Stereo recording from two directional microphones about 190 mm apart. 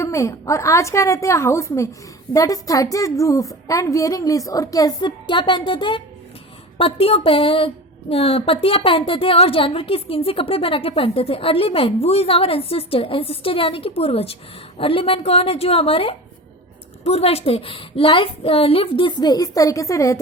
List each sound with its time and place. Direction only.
0.0 s a woman's voice: 15° left (ahead or behind)